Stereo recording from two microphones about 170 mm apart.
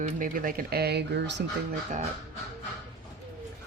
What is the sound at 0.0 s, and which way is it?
Speech, 55° right (ahead or behind).